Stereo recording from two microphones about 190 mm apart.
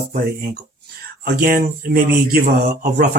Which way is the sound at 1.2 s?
50° right (ahead or behind).